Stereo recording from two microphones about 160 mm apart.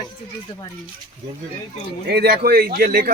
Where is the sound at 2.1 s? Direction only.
85° right; by 3.1 s 70° right (ahead or behind).